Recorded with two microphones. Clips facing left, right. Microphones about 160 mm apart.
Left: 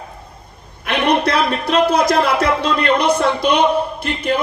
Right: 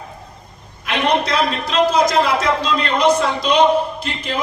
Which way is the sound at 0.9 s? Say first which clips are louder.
Left 2 dB; 60° left (ahead or behind).